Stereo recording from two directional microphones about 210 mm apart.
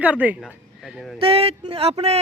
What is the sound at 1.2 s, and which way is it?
Speech, 25° right (ahead or behind).